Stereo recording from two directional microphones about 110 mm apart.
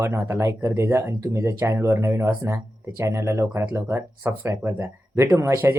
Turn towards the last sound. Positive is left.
turn(degrees=-25)  # may be behind; listen again after turning